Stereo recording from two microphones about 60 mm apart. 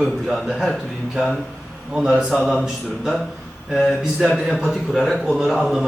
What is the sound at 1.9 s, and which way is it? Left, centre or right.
Speech, centre.